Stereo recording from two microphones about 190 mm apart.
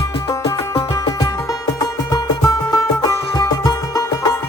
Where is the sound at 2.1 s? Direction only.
20° left (ahead or behind).